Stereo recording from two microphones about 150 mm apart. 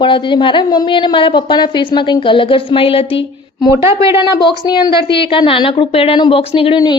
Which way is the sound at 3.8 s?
20° right (ahead or behind).